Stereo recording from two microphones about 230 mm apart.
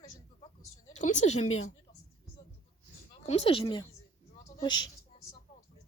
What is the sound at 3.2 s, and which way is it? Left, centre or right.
Speech, left.